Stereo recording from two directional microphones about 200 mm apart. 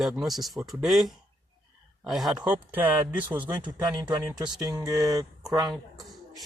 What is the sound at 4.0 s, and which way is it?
Speech, 20° right (ahead or behind).